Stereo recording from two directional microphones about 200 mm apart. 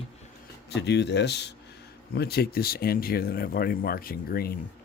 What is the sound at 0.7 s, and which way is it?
Speech, 60° left (ahead or behind).